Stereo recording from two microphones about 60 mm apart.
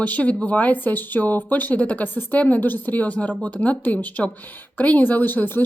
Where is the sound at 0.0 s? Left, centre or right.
Left.